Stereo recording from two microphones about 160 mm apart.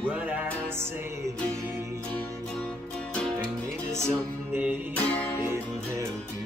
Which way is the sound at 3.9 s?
15° right (ahead or behind).